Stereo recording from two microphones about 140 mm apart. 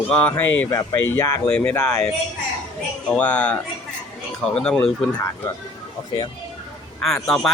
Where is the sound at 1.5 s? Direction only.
10° left (ahead or behind).